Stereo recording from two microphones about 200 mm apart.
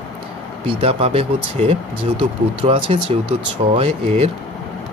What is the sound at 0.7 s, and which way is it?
Speech, 30° right (ahead or behind).